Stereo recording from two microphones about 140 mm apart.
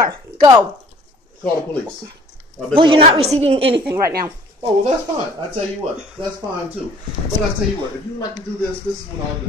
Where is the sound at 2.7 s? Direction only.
40° right (ahead or behind).